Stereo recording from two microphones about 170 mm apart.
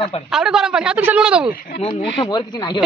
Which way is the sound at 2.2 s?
25° left (ahead or behind).